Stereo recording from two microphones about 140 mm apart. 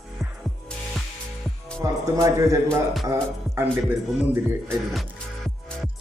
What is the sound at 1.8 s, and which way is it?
Music, 25° right (ahead or behind).